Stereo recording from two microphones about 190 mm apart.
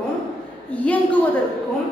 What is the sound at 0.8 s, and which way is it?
Speech, 10° left (ahead or behind).